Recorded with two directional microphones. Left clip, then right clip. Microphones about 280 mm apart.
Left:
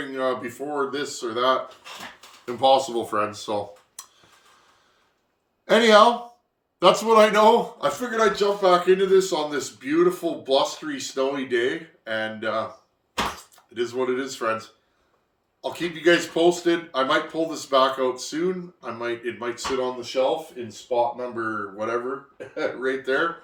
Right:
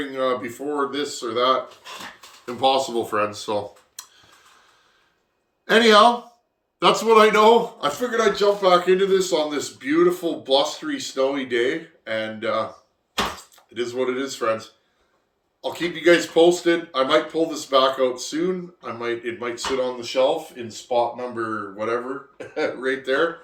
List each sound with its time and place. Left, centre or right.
0.1 s speech: centre
2.6 s speech: centre
5.6 s speech: centre
13.7 s speech: centre
15.6 s speech: centre